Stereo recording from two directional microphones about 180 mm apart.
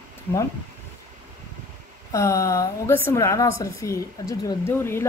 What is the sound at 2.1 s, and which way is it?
A woman's voice, 15° left (ahead or behind).